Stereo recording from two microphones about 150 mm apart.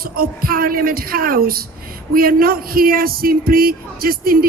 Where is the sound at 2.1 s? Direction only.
75° right (ahead or behind).